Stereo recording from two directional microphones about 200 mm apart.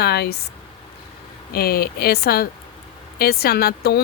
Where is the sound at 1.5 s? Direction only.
50° left (ahead or behind).